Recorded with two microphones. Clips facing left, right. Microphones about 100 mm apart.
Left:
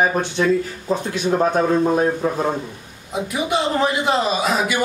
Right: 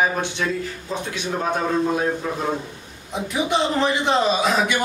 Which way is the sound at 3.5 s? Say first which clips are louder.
Left 2 dB; 5° left (ahead or behind).